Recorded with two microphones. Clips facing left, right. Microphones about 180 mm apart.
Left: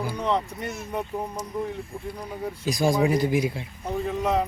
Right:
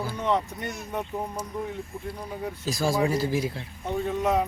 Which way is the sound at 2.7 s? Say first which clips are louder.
Left 3 dB; 15° left (ahead or behind).